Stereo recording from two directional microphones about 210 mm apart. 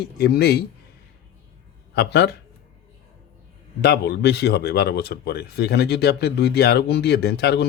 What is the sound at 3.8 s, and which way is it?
Speech, 50° left (ahead or behind).